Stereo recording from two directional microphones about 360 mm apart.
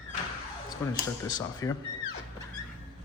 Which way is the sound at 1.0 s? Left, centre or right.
Centre.